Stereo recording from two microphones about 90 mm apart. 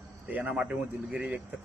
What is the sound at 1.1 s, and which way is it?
Speech, 15° right (ahead or behind).